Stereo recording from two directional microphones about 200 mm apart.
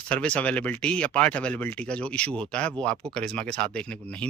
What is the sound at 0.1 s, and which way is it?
Speech, 5° left (ahead or behind).